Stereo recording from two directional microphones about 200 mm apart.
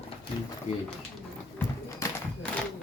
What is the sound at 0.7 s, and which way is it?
Speech, 35° left (ahead or behind).